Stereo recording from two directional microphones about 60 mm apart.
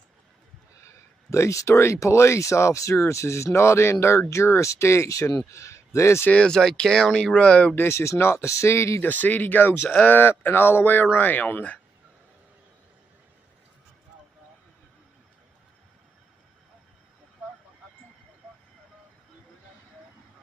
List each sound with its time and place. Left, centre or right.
1.3 s a man's voice: left
6.3 s speech: centre
7.3 s speech: left
7.7 s speech: left
8.0 s speech: left
9.0 s speech: left